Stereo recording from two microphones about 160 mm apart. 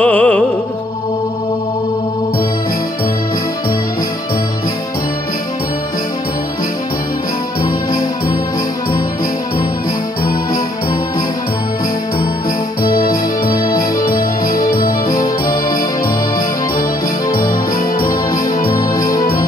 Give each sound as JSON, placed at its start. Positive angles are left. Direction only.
{"t": 0.0, "sound": "music", "side_deg": 10}
{"t": 12.8, "sound": "organ", "side_deg": 65}
{"t": 14.4, "sound": "music", "side_deg": 60}
{"t": 15.2, "sound": "music", "side_deg": 25}
{"t": 18.8, "sound": "music", "side_deg": 60}